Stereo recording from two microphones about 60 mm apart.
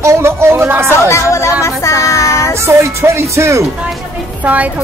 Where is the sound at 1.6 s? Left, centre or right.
Left.